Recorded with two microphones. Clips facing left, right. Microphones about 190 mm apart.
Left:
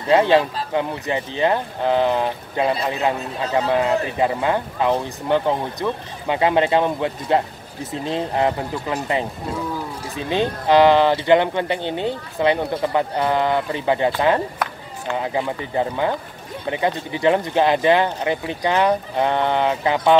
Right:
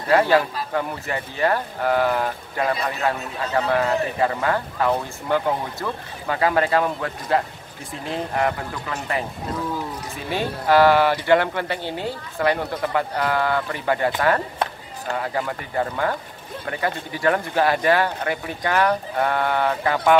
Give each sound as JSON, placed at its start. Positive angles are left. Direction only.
{"t": 0.1, "sound": "speech", "side_deg": 20}
{"t": 14.6, "sound": "run", "side_deg": -30}
{"t": 15.1, "sound": "speech", "side_deg": 20}